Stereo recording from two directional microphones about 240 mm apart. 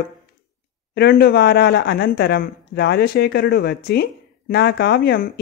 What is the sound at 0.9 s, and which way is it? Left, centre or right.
Speech, left.